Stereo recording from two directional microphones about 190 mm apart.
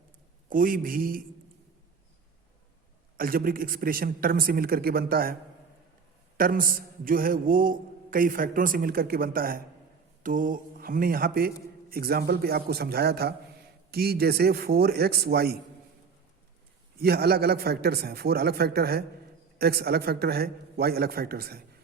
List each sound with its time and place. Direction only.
0.5 s a man's voice: 45° right (ahead or behind)
3.2 s a man's voice: 50° right (ahead or behind)
17.0 s a man's voice: 55° right (ahead or behind)